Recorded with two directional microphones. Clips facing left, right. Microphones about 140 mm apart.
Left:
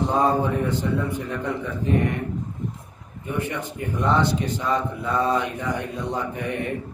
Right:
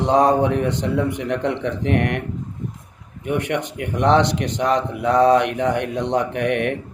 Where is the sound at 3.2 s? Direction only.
75° right (ahead or behind).